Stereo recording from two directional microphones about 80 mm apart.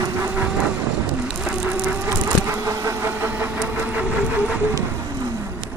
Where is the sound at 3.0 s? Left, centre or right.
Right.